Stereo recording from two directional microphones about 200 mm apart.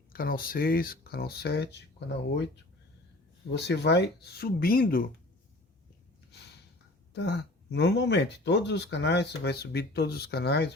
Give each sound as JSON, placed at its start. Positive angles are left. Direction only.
{"t": 0.1, "sound": "speech", "side_deg": 50}
{"t": 3.5, "sound": "speech", "side_deg": 60}
{"t": 7.1, "sound": "speech", "side_deg": 55}